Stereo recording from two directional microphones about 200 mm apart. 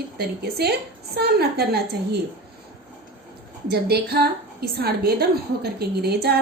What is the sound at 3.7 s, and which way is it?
A woman's voice, 55° right (ahead or behind).